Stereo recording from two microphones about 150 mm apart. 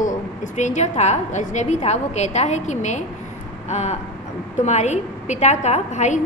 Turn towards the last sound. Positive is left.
turn(degrees=50)  # may be behind; listen again after turning